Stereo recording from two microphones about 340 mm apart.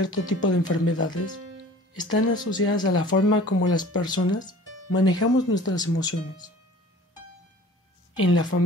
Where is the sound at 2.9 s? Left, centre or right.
Left.